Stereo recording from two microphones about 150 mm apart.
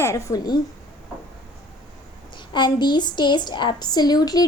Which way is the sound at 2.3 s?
30° left (ahead or behind).